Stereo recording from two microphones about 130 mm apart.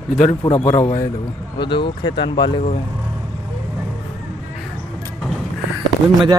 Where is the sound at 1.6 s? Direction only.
40° left (ahead or behind).